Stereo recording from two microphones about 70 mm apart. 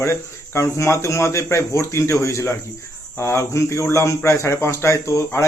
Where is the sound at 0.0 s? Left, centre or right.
Left.